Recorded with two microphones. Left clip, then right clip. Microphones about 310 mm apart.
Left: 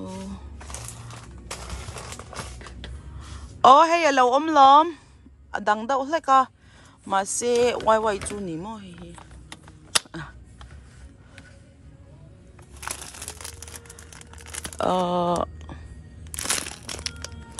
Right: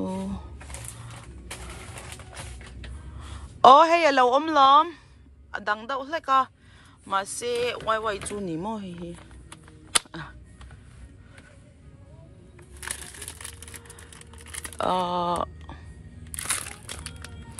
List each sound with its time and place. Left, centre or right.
0.0 s a sound: centre
3.2 s a woman's voice: centre
14.8 s speech: centre
16.6 s crushing: left